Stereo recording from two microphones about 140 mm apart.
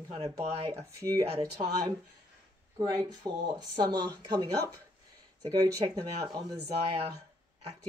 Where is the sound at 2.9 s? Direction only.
25° right (ahead or behind).